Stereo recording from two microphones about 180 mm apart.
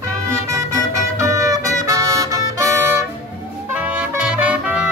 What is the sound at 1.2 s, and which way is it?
Music, 20° right (ahead or behind).